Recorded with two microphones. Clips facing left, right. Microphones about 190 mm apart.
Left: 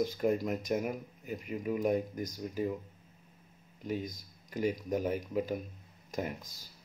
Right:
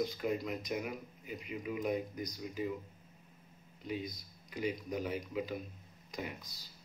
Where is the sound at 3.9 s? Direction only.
45° left (ahead or behind).